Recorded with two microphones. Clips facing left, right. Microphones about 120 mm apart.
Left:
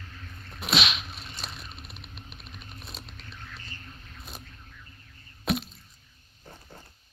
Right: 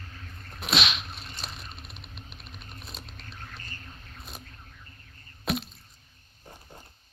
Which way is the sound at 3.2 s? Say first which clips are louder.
Right 1 dB; 45° right (ahead or behind).